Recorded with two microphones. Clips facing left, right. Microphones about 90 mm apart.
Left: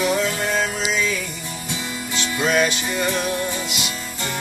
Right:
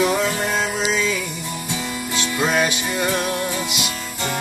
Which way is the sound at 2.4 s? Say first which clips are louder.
Left 1 dB; 15° right (ahead or behind).